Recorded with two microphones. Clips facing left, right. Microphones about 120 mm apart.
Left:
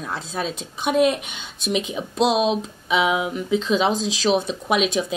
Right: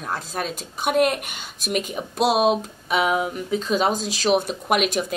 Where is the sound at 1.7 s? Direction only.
50° right (ahead or behind).